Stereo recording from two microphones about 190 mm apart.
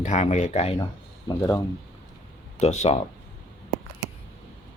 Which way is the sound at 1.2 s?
10° left (ahead or behind).